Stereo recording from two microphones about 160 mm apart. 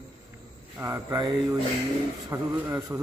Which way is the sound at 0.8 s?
15° right (ahead or behind).